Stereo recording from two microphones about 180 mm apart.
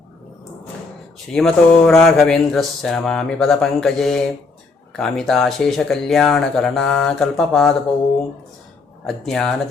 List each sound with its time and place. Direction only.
1.3 s speech: 5° left (ahead or behind)
9.0 s speech: centre (ahead or behind)